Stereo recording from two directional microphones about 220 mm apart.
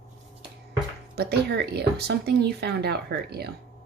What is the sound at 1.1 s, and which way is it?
Speech, 45° right (ahead or behind).